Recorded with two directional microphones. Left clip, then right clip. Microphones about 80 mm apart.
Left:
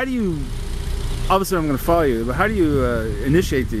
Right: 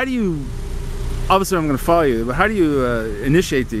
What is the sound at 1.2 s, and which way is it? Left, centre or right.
Speech, centre.